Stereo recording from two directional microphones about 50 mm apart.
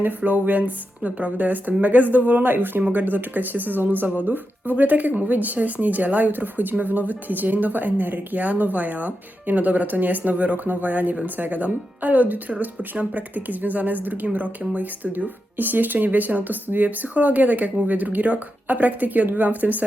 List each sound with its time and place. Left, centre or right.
0.2 s speech: right